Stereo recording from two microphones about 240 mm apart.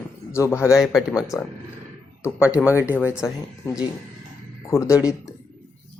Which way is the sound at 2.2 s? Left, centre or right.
Centre.